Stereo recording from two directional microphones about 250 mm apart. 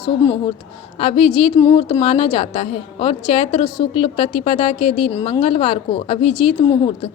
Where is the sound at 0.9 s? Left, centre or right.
Left.